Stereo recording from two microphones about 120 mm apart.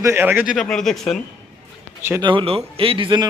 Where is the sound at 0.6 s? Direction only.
5° left (ahead or behind).